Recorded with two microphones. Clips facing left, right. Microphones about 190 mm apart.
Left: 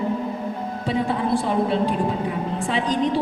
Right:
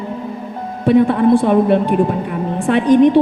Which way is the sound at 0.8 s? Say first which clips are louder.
Right 12 dB; 60° right (ahead or behind).